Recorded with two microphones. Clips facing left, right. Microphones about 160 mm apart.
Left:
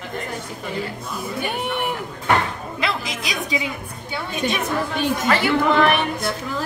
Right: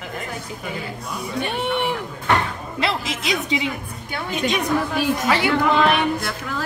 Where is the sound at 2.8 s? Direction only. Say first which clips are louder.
Right 2 dB; 25° right (ahead or behind).